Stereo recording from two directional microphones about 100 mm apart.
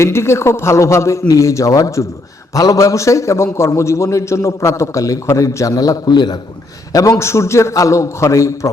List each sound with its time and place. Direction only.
0.0 s a man's voice: 25° left (ahead or behind); by 6.3 s 45° left (ahead or behind)
6.9 s a man's voice: 30° left (ahead or behind)